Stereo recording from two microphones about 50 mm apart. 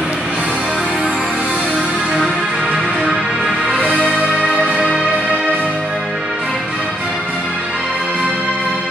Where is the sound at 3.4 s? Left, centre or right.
Centre.